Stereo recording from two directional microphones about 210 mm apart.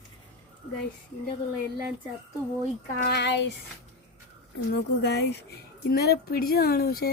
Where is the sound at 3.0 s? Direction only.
55° left (ahead or behind).